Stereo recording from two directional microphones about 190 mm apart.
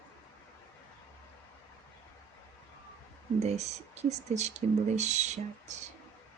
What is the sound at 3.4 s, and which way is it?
Speech, 35° right (ahead or behind).